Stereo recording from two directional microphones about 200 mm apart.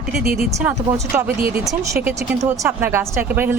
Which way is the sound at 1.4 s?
45° right (ahead or behind).